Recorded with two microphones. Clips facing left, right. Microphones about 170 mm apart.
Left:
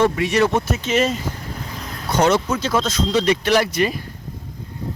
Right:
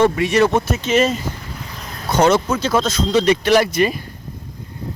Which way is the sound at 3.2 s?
15° right (ahead or behind).